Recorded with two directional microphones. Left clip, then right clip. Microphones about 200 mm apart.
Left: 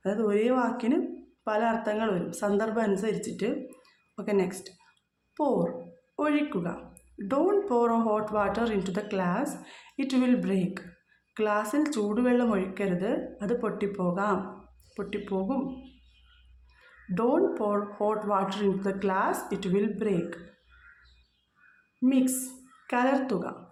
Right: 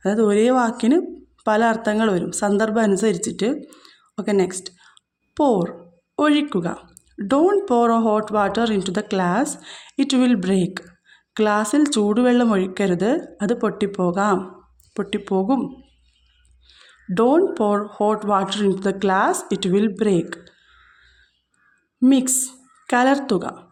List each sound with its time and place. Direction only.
0.0 s a woman's voice: 40° right (ahead or behind)
17.2 s speech: 35° right (ahead or behind)
22.0 s a woman's voice: 40° right (ahead or behind)